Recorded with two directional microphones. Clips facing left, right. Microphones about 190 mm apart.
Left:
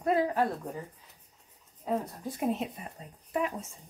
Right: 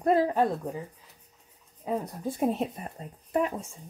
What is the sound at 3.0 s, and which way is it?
Speech, 45° right (ahead or behind).